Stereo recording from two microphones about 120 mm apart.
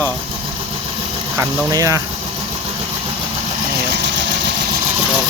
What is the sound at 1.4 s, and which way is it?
Speech, 30° right (ahead or behind).